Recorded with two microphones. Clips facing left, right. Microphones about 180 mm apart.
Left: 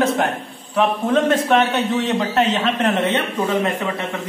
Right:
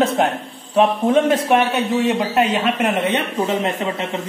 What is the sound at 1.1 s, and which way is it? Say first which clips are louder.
A man's voice: right 1 dB; 10° right (ahead or behind).